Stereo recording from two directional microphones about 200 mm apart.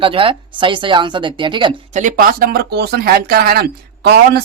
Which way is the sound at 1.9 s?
40° right (ahead or behind).